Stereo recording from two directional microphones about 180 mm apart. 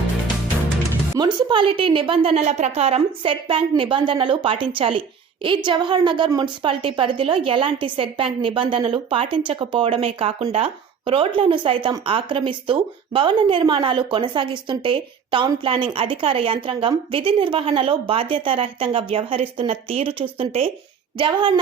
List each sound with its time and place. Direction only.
1.1 s speech: 25° right (ahead or behind)